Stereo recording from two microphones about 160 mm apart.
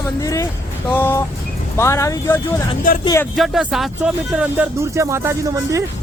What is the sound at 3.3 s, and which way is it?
Speech, centre (ahead or behind).